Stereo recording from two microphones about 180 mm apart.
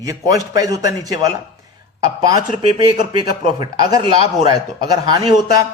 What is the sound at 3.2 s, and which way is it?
Speech, 25° right (ahead or behind).